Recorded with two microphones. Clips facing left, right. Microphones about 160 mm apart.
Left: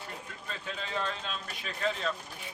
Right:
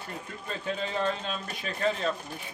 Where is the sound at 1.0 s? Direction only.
45° right (ahead or behind).